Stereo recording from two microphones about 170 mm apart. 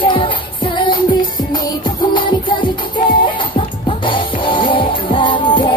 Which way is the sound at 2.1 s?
30° left (ahead or behind).